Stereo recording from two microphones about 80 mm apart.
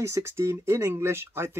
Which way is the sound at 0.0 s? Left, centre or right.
Right.